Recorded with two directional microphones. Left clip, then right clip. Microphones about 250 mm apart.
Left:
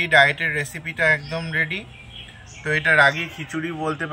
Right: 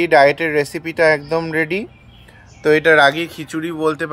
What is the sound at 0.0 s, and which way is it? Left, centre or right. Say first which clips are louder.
Speech: right 4 dB; right.